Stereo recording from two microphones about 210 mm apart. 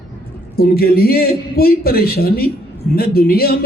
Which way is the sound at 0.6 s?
45° left (ahead or behind).